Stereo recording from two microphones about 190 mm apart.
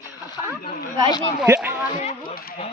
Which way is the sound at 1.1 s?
20° left (ahead or behind).